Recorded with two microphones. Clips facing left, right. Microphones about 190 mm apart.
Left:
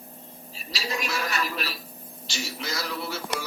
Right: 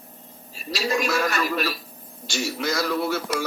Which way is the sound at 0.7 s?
50° right (ahead or behind).